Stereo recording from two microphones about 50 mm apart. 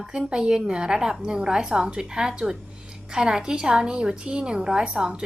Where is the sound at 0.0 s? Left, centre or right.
Centre.